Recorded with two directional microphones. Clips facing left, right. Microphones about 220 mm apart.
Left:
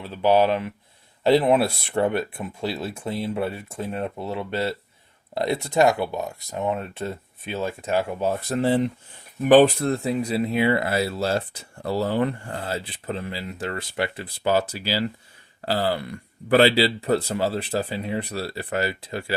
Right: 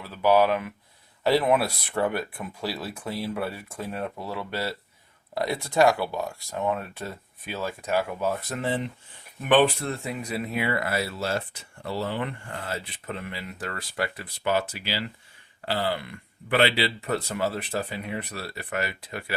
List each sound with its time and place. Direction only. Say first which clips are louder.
0.0 s speech: left 2 dB; 25° left (ahead or behind)